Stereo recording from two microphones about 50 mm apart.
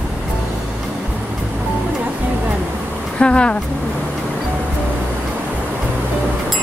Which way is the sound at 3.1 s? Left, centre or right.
Centre.